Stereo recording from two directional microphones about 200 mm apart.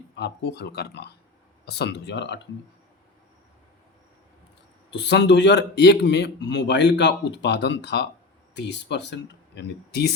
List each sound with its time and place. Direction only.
0.2 s a man's voice: 55° left (ahead or behind)
4.9 s a man's voice: 60° left (ahead or behind)